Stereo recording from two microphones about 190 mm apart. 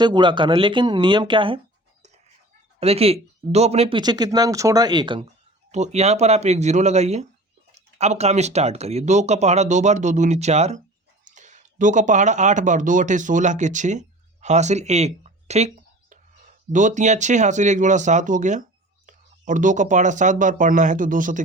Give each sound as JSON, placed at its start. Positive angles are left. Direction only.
{"t": 0.0, "sound": "speech", "side_deg": -25}
{"t": 5.7, "sound": "speech", "side_deg": -35}